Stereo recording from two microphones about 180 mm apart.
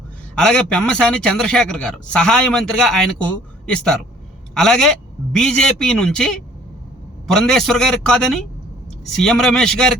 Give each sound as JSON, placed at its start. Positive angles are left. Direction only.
{"t": 0.3, "sound": "a man's voice", "side_deg": 5}
{"t": 4.5, "sound": "a man's voice", "side_deg": 0}